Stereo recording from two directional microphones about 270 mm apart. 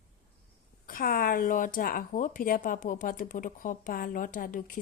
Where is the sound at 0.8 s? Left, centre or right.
Left.